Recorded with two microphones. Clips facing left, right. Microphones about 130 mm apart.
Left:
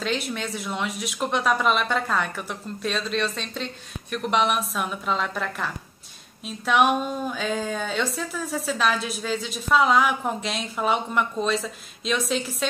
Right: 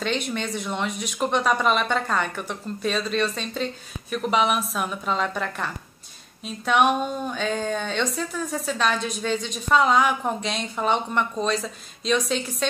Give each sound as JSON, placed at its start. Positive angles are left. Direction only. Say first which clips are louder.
{"t": 0.0, "sound": "speech", "louder": "right 1 dB", "side_deg": 0}